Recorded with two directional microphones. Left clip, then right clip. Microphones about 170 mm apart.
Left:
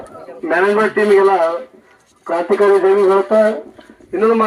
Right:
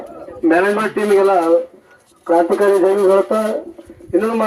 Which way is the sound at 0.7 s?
35° right (ahead or behind).